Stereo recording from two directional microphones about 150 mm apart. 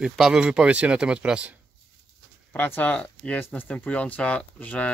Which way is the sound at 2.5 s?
10° left (ahead or behind).